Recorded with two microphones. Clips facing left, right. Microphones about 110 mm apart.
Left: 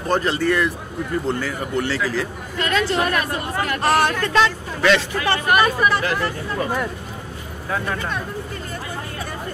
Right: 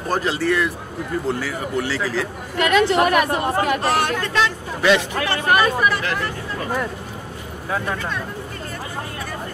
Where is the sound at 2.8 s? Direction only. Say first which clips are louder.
Right 4 dB; 65° right (ahead or behind).